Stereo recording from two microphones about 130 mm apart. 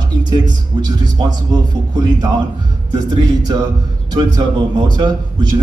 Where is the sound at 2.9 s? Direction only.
30° right (ahead or behind).